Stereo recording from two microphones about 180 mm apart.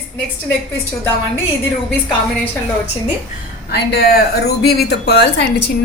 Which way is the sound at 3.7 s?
65° left (ahead or behind).